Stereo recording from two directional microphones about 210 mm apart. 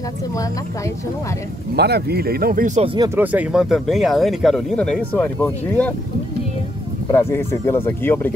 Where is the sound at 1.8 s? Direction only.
50° right (ahead or behind); by 3.1 s 25° right (ahead or behind).